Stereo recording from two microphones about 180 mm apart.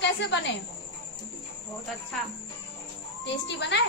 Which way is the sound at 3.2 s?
80° left.